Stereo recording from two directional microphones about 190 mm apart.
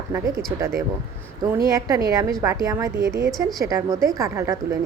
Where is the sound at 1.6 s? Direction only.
20° right (ahead or behind).